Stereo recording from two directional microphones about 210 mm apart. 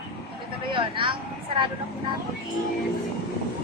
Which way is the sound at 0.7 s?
25° right (ahead or behind).